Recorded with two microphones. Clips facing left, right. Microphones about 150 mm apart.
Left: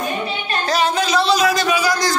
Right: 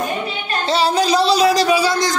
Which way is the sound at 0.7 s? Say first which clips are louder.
Right 3 dB; 35° right (ahead or behind).